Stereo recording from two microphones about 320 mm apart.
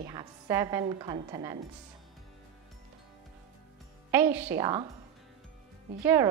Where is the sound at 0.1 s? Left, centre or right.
Centre.